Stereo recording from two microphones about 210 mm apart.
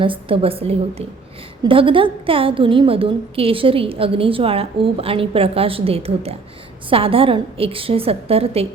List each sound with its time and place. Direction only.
0.0 s a woman's voice: 25° right (ahead or behind)